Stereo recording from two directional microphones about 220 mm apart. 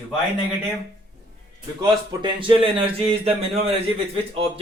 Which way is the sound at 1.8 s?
20° right (ahead or behind).